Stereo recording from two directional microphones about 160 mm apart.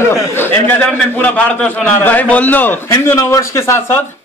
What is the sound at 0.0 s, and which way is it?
A man's voice, 15° left (ahead or behind).